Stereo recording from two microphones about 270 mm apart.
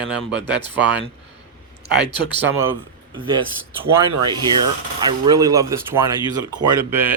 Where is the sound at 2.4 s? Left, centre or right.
Centre.